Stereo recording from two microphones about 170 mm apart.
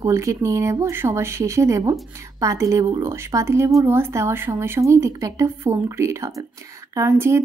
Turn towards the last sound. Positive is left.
turn(degrees=-15)  # may be behind; listen again after turning